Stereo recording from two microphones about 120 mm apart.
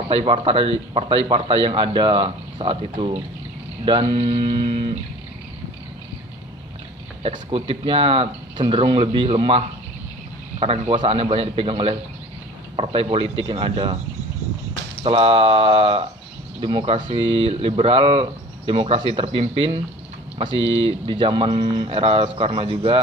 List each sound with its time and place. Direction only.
0.2 s speech: 50° right (ahead or behind)
7.2 s a man's voice: 55° right (ahead or behind)
15.0 s speech: 50° right (ahead or behind)